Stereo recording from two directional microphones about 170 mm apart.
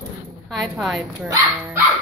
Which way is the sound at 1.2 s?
20° right (ahead or behind).